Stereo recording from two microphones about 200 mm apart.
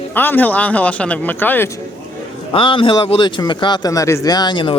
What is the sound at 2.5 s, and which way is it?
A man's voice, 25° left (ahead or behind).